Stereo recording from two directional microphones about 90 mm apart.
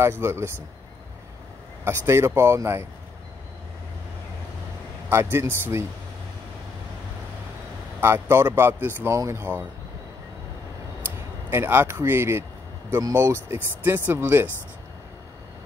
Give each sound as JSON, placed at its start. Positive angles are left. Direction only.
{"t": 0.2, "sound": "speech", "side_deg": -30}
{"t": 1.9, "sound": "speech", "side_deg": -30}
{"t": 5.1, "sound": "speech", "side_deg": -30}
{"t": 8.0, "sound": "speech", "side_deg": -25}
{"t": 9.1, "sound": "speech", "side_deg": -35}
{"t": 11.5, "sound": "speech", "side_deg": -25}